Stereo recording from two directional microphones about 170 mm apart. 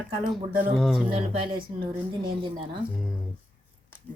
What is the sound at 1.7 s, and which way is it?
Speech, 40° right (ahead or behind).